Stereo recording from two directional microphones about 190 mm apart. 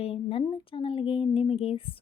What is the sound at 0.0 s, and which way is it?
Speech, 30° left (ahead or behind).